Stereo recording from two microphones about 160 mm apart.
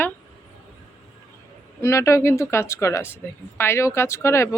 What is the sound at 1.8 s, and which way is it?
Speech, 20° left (ahead or behind).